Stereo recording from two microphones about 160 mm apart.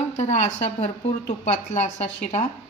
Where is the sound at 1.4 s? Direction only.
45° left (ahead or behind).